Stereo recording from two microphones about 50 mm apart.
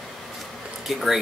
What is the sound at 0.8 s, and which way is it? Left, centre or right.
Speech, centre.